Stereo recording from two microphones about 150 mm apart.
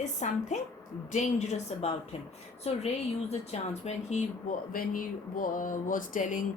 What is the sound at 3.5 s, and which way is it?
Speech, 50° left (ahead or behind).